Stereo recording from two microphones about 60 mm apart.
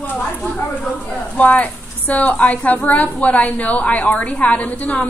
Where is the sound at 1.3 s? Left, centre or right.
Left.